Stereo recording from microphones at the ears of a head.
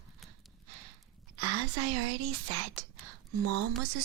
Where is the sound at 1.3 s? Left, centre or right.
Right.